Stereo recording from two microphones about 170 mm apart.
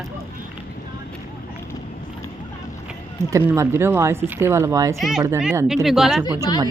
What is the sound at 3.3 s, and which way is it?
Speech, 15° right (ahead or behind).